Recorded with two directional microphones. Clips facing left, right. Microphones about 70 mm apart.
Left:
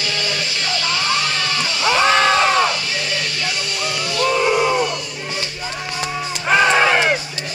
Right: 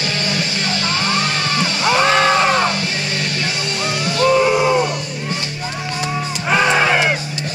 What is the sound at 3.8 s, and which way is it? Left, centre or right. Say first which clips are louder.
Music: right 4 dB; right.